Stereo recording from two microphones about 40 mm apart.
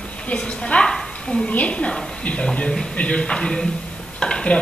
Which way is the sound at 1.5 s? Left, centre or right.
Left.